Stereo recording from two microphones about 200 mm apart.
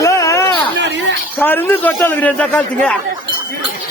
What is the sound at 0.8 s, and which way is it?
Speech, 65° right (ahead or behind).